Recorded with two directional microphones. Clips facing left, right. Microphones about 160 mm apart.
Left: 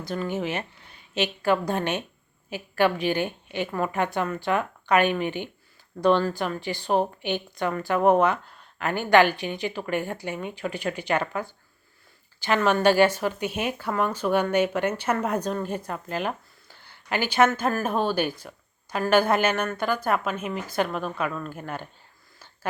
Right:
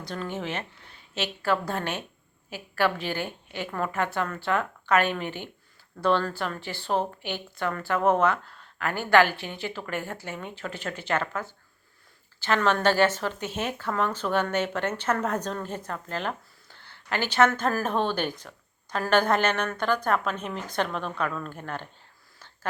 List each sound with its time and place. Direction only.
0.0 s a woman's voice: 10° left (ahead or behind)
17.5 s a woman's voice: centre (ahead or behind)